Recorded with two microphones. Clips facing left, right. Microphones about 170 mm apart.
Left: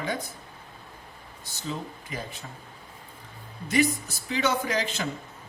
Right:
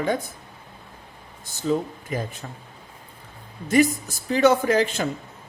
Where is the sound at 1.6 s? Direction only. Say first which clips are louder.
Right 11 dB; 45° right (ahead or behind).